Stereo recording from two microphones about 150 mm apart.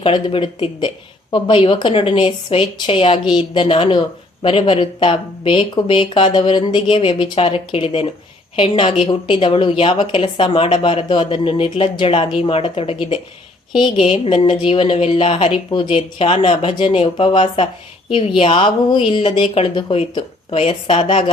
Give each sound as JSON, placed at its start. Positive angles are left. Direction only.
{"t": 0.0, "sound": "a woman's voice", "side_deg": 35}